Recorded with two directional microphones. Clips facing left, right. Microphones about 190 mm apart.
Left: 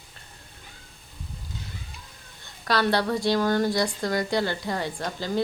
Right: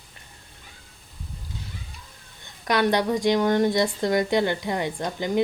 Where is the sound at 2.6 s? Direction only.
20° right (ahead or behind).